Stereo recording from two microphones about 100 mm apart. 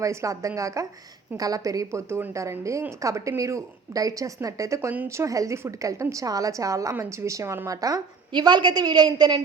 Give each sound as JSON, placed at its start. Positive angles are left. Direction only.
{"t": 0.0, "sound": "a woman's voice", "side_deg": -30}